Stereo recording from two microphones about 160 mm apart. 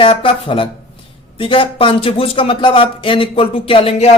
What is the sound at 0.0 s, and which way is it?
Speech, 35° left (ahead or behind).